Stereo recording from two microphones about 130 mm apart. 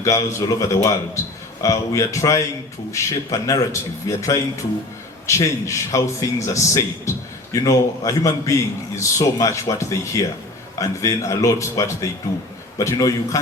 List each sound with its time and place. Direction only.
0.0 s a man's voice: 25° left (ahead or behind)